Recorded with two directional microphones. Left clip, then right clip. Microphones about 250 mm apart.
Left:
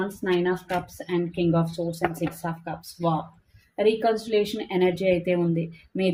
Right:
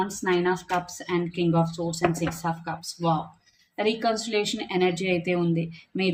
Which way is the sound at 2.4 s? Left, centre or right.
Centre.